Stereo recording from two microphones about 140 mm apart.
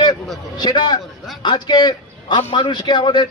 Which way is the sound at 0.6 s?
30° left (ahead or behind).